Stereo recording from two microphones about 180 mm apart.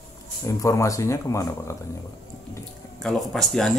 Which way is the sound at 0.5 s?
15° left (ahead or behind).